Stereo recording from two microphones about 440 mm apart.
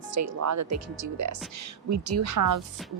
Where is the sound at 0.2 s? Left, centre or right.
Right.